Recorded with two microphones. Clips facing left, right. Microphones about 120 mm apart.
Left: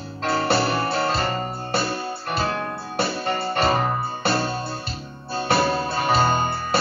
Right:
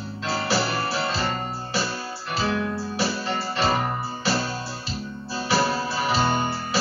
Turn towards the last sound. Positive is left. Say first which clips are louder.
# left 2 dB
turn(degrees=55)  # may be behind; listen again after turning